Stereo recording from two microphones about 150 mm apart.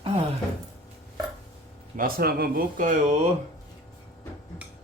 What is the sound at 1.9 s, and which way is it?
Speech, 75° right (ahead or behind).